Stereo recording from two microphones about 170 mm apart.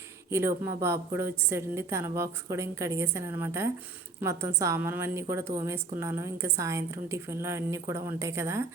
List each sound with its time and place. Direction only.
0.3 s a woman's voice: 15° right (ahead or behind)